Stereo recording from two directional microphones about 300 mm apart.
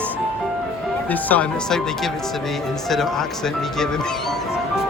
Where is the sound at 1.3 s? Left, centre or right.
Centre.